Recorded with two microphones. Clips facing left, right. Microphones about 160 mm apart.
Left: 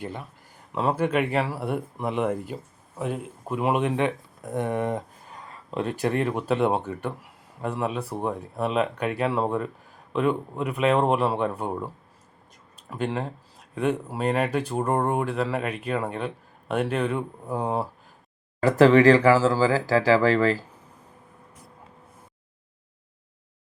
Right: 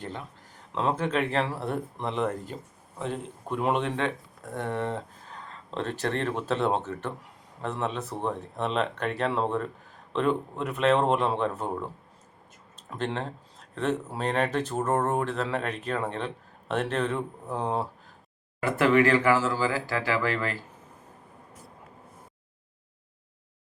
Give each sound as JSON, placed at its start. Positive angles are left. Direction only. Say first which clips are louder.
{"t": 0.0, "sound": "speech", "louder": "left 2 dB", "side_deg": 10}
{"t": 12.9, "sound": "speech", "louder": "left 3 dB", "side_deg": 5}
{"t": 18.6, "sound": "speech", "louder": "left 6 dB", "side_deg": 35}